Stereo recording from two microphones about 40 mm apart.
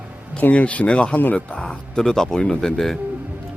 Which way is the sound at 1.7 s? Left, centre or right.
Centre.